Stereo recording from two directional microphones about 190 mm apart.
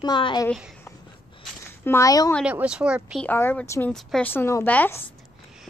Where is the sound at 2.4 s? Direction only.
5° right (ahead or behind).